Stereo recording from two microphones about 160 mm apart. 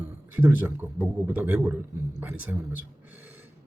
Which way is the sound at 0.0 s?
10° right (ahead or behind).